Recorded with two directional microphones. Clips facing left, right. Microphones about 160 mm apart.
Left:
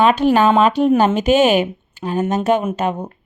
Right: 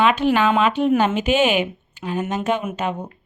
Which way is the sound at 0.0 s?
40° left (ahead or behind).